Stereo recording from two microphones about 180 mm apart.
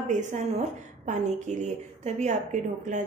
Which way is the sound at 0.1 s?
45° right (ahead or behind).